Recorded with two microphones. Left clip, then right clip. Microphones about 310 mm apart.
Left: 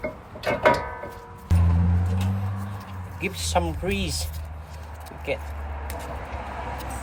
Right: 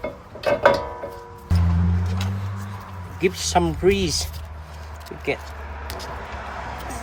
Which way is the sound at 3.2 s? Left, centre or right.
Right.